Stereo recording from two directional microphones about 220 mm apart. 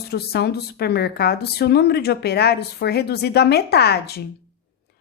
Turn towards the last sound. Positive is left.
turn(degrees=45)  # may be behind; listen again after turning